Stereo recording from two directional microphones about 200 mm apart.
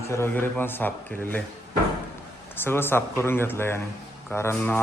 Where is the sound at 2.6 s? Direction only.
10° left (ahead or behind).